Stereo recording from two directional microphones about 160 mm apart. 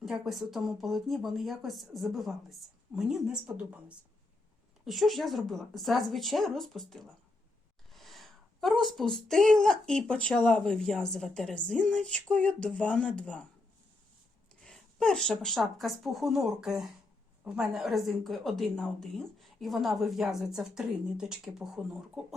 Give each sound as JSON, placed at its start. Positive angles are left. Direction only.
{"t": 0.0, "sound": "a woman's voice", "side_deg": 0}
{"t": 7.9, "sound": "a sound", "side_deg": 0}
{"t": 8.8, "sound": "a woman's voice", "side_deg": 0}
{"t": 14.6, "sound": "a woman's voice", "side_deg": 5}